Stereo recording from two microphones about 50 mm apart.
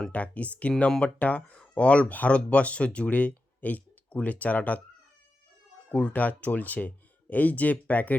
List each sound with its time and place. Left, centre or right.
0.1 s speech: left
5.9 s speech: left